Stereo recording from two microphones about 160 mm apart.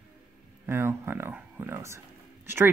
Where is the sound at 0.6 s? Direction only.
15° right (ahead or behind).